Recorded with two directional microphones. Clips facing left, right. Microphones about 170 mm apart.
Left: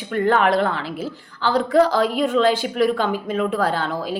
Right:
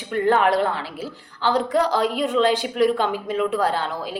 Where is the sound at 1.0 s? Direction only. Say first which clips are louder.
Left 2 dB; 15° right (ahead or behind).